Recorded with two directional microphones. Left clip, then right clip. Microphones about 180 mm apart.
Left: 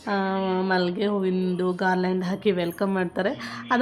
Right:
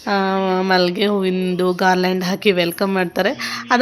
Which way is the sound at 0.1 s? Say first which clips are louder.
Right 7 dB; 20° right (ahead or behind).